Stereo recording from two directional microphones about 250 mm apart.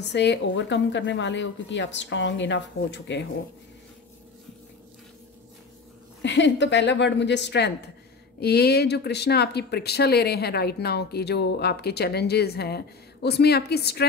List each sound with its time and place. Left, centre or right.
0.0 s a woman's voice: left
6.2 s a woman's voice: left